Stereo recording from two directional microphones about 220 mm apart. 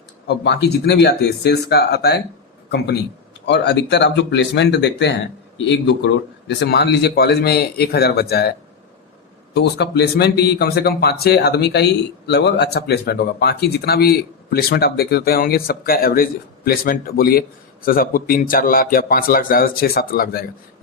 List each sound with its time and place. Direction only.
0.3 s a man's voice: 50° left (ahead or behind)
9.6 s speech: 50° left (ahead or behind)